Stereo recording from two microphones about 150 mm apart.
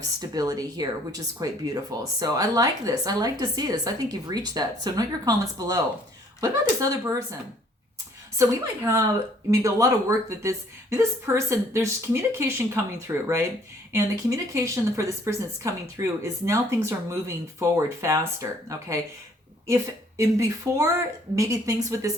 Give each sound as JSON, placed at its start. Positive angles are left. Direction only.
{"t": 0.2, "sound": "speech", "side_deg": -25}
{"t": 8.4, "sound": "speech", "side_deg": -20}